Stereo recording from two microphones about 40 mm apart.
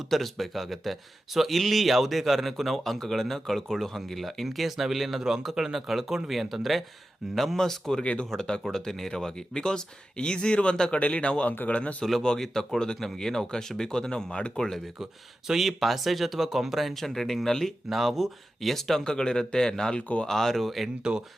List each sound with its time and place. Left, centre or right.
0.1 s speech: centre
7.3 s speech: centre; by 12.0 s left
12.4 s speech: centre
15.4 s speech: centre
16.9 s speech: centre
19.0 s speech: centre
21.0 s speech: centre